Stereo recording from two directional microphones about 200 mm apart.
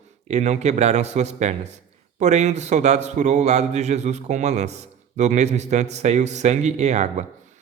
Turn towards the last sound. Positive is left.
turn(degrees=-35)  # may be behind; listen again after turning